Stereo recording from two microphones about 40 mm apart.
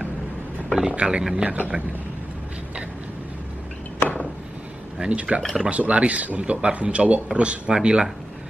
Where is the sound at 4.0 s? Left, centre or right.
Left.